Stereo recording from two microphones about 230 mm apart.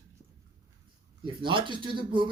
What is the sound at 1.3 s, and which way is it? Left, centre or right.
Speech, right.